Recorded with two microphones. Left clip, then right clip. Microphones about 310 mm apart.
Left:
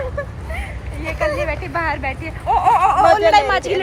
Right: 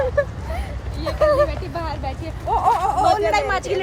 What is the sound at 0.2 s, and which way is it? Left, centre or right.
Vehicle, right.